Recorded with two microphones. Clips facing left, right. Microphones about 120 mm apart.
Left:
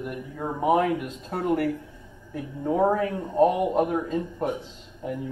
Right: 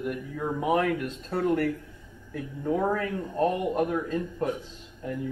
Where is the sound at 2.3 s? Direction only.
20° left (ahead or behind).